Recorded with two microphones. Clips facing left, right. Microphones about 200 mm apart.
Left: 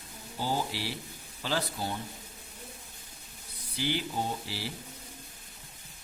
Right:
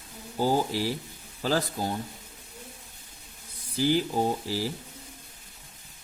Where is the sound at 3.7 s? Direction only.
40° right (ahead or behind).